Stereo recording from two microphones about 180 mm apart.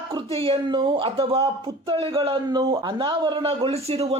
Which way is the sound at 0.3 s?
30° right (ahead or behind).